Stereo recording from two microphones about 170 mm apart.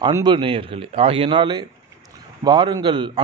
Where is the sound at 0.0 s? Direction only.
25° right (ahead or behind).